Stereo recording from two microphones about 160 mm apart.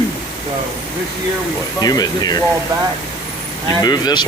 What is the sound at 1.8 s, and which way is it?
Speech, 25° left (ahead or behind).